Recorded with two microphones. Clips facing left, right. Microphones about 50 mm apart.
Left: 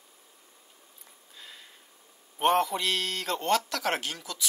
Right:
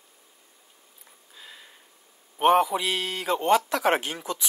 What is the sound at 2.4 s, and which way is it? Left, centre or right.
A man's voice, centre.